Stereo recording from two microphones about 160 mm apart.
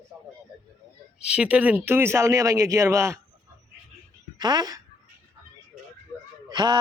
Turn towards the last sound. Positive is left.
turn(degrees=-25)  # may be behind; listen again after turning